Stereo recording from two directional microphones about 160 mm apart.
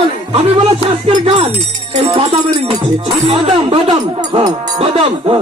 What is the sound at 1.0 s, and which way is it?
Music, 35° right (ahead or behind).